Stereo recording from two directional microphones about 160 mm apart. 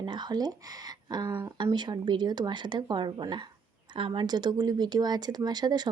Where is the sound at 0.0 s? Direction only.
30° right (ahead or behind).